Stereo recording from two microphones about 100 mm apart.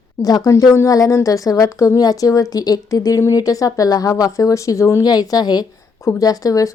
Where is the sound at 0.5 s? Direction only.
30° left (ahead or behind).